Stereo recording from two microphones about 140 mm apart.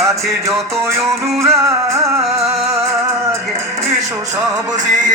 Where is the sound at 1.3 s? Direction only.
Centre (ahead or behind).